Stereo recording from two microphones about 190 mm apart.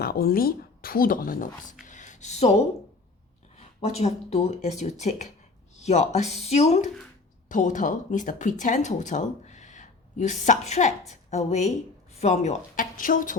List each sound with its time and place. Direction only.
0.0 s speech: 55° left (ahead or behind)
1.9 s a sound: 40° left (ahead or behind)
3.8 s a woman's voice: 35° left (ahead or behind)